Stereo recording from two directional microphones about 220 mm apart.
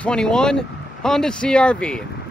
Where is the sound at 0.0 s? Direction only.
5° left (ahead or behind).